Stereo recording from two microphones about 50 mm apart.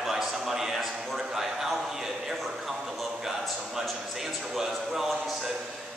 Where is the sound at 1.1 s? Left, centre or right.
Centre.